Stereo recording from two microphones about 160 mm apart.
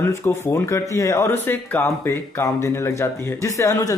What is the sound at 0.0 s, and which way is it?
Speech, 15° left (ahead or behind).